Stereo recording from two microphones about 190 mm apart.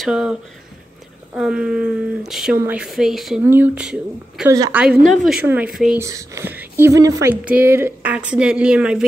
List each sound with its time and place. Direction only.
0.0 s speech: 5° right (ahead or behind)
4.5 s a woman's voice: 20° right (ahead or behind)
4.7 s speech: centre (ahead or behind)
5.9 s speech: 15° right (ahead or behind)